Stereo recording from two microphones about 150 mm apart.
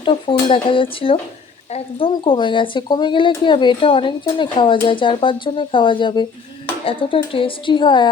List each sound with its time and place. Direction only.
0.0 s speech: 35° left (ahead or behind)